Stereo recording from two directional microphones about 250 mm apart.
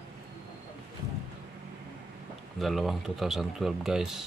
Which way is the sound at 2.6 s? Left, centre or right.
Centre.